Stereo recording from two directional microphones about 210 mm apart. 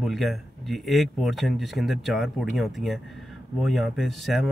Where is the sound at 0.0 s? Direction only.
Centre (ahead or behind).